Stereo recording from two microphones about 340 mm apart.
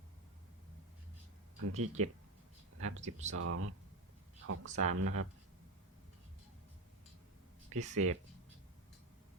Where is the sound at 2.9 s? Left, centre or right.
Centre.